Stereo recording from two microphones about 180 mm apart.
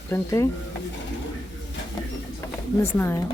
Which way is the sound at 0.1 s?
15° left (ahead or behind).